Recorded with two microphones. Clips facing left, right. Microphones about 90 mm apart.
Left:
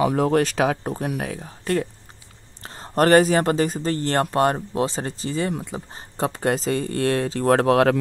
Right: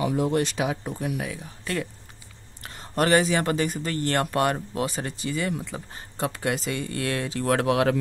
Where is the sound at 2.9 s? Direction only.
45° left (ahead or behind).